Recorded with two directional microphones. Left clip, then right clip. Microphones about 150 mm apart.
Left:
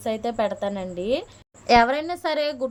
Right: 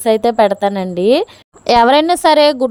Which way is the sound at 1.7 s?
60° right (ahead or behind).